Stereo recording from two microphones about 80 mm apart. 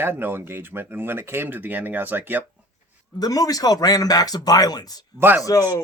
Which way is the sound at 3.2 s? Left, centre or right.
Left.